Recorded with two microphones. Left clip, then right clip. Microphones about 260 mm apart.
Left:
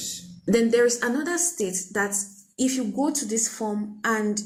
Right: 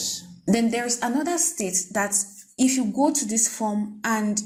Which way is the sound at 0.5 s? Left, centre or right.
Right.